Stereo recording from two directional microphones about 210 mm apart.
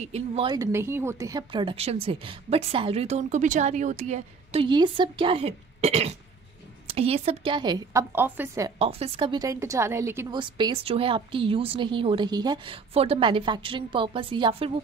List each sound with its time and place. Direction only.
0.0 s speech: 30° right (ahead or behind)
0.5 s a woman's voice: 15° right (ahead or behind)
8.7 s a woman's voice: 25° right (ahead or behind)